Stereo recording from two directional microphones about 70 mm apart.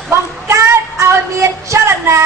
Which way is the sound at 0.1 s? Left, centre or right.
Right.